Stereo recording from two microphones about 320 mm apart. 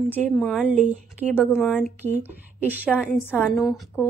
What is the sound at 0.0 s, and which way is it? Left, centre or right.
Speech, centre.